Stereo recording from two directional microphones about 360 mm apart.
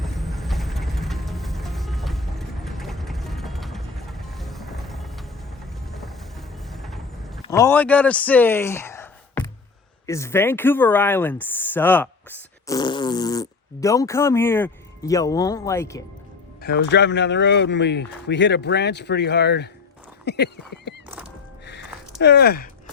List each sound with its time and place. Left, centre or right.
0.0 s music: centre
5.9 s horse: centre
7.4 s speech: centre
16.6 s speech: left
22.2 s speech: left